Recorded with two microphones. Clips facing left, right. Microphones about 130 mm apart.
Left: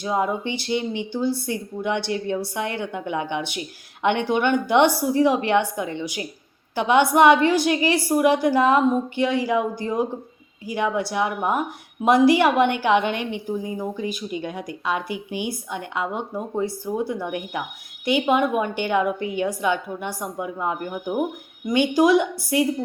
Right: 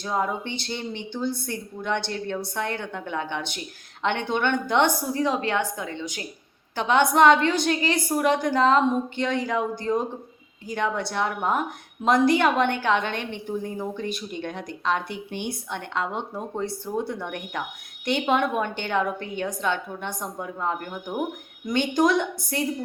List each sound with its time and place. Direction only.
0.0 s a woman's voice: 10° left (ahead or behind)